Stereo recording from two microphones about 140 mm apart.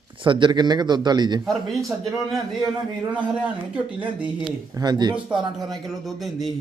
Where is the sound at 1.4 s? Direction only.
Centre (ahead or behind).